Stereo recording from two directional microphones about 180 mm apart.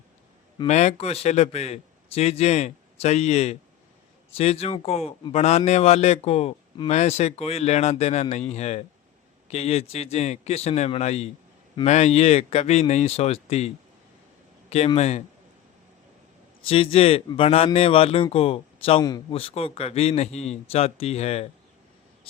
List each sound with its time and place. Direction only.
0.7 s a man's voice: 40° left (ahead or behind)
14.8 s a man's voice: 35° left (ahead or behind)
16.6 s a man's voice: 30° left (ahead or behind)